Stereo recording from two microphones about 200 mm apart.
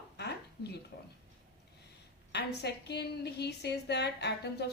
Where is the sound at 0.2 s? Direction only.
55° left (ahead or behind).